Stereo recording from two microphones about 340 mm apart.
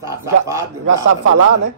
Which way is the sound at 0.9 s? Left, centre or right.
Right.